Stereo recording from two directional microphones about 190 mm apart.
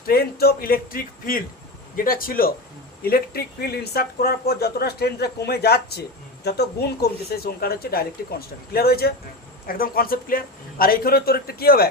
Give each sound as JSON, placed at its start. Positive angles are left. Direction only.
{"t": 0.0, "sound": "speech", "side_deg": 55}